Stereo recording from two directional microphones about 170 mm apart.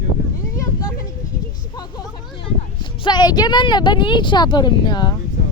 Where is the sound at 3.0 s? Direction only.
25° left (ahead or behind).